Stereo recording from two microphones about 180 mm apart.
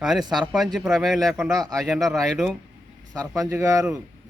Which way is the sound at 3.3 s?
20° right (ahead or behind).